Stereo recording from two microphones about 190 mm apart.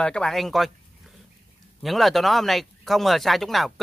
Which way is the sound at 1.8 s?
Centre (ahead or behind).